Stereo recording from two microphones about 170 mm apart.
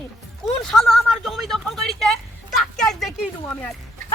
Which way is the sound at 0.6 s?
Centre (ahead or behind).